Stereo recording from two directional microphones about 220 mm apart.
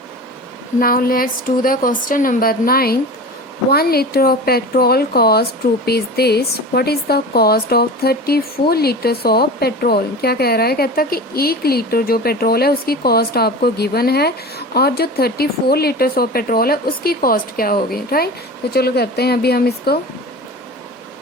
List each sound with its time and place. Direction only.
0.8 s a woman's voice: 40° left (ahead or behind)